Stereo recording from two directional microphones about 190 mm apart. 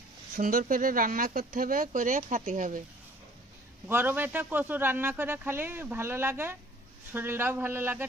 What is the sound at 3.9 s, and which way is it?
Speech, 10° right (ahead or behind).